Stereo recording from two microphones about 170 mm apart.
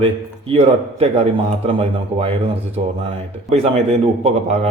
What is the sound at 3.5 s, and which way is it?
Speech, 35° right (ahead or behind).